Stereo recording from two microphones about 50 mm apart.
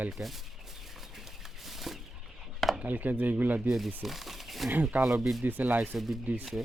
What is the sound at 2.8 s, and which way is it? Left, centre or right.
Speech, right.